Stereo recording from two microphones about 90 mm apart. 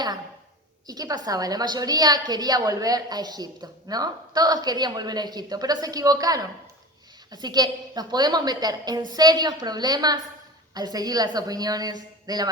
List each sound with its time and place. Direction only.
0.9 s a woman's voice: 45° right (ahead or behind)